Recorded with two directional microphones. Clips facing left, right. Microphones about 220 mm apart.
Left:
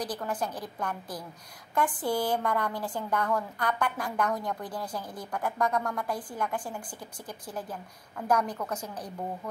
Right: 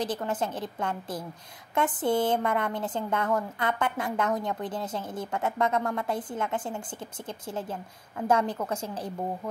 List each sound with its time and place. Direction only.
0.0 s a woman's voice: 25° right (ahead or behind)